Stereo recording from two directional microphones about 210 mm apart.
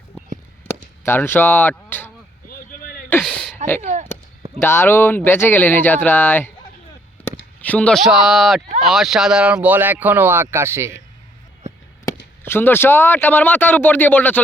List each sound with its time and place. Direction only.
1.0 s speech: 10° left (ahead or behind)
2.5 s a sound: 40° left (ahead or behind)
3.1 s a sound: 5° left (ahead or behind)
3.8 s speech: 35° right (ahead or behind)
4.6 s a man's voice: 10° left (ahead or behind)
7.6 s speech: 5° left (ahead or behind); by 11.0 s 15° right (ahead or behind)
12.4 s a man's voice: 10° left (ahead or behind)